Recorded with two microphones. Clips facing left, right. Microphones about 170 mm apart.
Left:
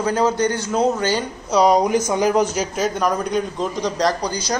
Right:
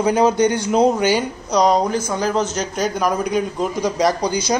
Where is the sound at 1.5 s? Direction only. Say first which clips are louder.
Left 1 dB; 10° left (ahead or behind).